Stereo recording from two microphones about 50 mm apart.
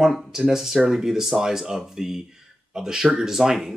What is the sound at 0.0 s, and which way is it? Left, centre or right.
Speech, centre.